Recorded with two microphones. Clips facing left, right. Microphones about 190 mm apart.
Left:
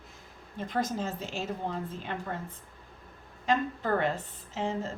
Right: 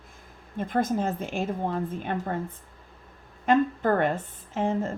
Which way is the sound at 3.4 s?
50° right (ahead or behind).